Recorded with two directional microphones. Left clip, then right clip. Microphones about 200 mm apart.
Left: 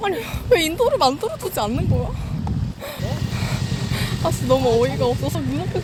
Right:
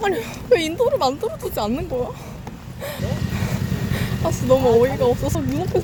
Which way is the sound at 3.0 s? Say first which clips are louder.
Left 1 dB; 55° right (ahead or behind).